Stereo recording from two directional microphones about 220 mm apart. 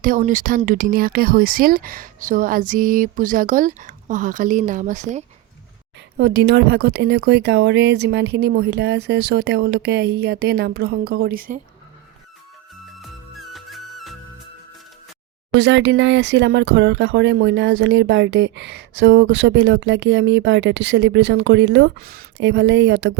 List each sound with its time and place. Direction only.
0.0 s speech: 35° right (ahead or behind)
6.1 s speech: 50° right (ahead or behind)
13.0 s music: centre (ahead or behind)
15.5 s speech: 55° right (ahead or behind)